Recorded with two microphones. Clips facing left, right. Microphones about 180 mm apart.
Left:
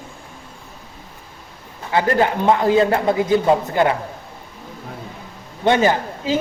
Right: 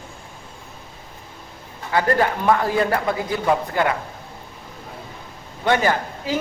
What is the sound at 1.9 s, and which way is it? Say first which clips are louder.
A man's voice: left 2 dB; 20° left (ahead or behind).